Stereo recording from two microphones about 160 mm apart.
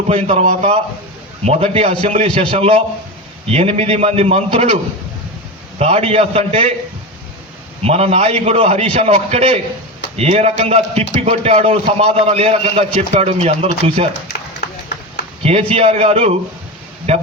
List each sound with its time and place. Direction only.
0.1 s a man's voice: 40° right (ahead or behind)
5.8 s a man's voice: 40° right (ahead or behind)
7.8 s a man's voice: 40° right (ahead or behind)
14.3 s run: 80° left
15.7 s a man's voice: 40° right (ahead or behind)